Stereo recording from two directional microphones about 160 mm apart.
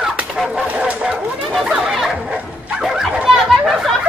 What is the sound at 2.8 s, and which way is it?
Chatter, 5° right (ahead or behind).